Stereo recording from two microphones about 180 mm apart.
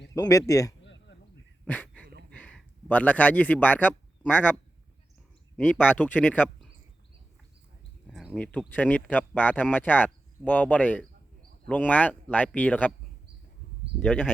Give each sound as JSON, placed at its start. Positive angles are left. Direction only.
{"t": 0.1, "sound": "speech", "side_deg": 20}
{"t": 0.9, "sound": "a sound", "side_deg": 90}
{"t": 1.6, "sound": "dog", "side_deg": 10}
{"t": 2.3, "sound": "speech", "side_deg": 5}
{"t": 5.5, "sound": "speech", "side_deg": 5}
{"t": 8.0, "sound": "speech", "side_deg": 0}
{"t": 14.0, "sound": "speech", "side_deg": 5}